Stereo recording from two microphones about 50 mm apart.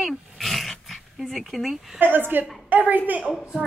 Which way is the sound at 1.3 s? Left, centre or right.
Centre.